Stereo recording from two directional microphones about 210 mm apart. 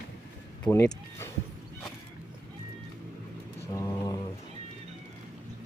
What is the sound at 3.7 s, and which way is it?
Mantra, 15° left (ahead or behind).